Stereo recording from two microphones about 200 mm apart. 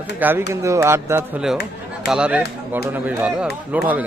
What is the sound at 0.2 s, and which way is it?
A man's voice, 10° right (ahead or behind).